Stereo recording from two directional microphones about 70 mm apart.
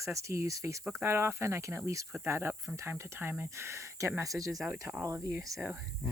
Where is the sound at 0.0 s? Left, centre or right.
Right.